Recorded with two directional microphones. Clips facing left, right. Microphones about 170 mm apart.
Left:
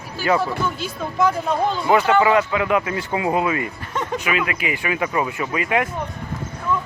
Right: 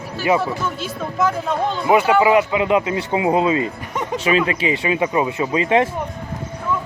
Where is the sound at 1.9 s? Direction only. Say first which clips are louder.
Right 2 dB; 10° right (ahead or behind).